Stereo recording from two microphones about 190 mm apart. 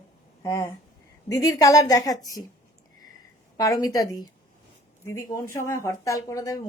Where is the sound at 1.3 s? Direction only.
20° left (ahead or behind).